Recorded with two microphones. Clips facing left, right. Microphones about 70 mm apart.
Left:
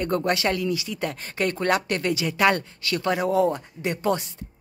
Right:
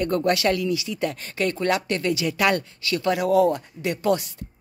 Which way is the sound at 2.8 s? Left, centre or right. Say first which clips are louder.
Right 1 dB; left.